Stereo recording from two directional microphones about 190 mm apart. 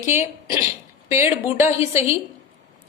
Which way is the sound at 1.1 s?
15° right (ahead or behind).